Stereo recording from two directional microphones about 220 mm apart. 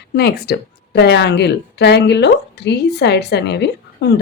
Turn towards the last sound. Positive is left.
turn(degrees=50)  # may be behind; listen again after turning